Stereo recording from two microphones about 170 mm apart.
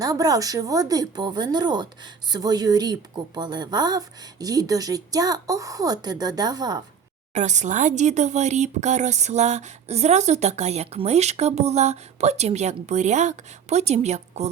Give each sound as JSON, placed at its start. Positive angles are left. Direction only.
{"t": 0.0, "sound": "a woman's voice", "side_deg": -20}
{"t": 7.3, "sound": "speech", "side_deg": -45}